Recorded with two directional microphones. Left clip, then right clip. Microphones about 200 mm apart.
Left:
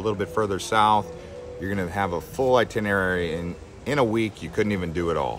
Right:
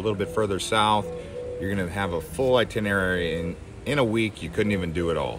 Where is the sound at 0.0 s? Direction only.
15° left (ahead or behind).